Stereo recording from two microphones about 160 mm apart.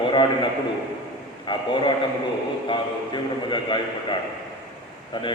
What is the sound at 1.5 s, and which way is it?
A man's voice, 30° left (ahead or behind).